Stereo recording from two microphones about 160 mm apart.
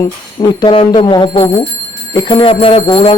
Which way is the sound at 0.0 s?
30° left (ahead or behind).